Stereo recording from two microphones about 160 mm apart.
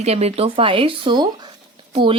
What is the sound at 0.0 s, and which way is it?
A woman's voice, 40° right (ahead or behind).